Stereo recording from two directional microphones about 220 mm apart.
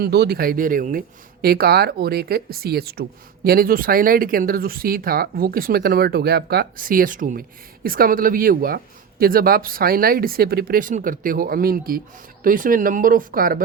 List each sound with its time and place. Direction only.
0.0 s speech: 45° right (ahead or behind)